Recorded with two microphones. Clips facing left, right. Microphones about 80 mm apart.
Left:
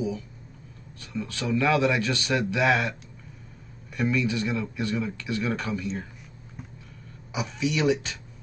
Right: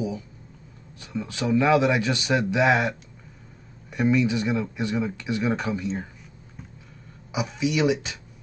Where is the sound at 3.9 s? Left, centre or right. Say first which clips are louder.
Right 4 dB; centre.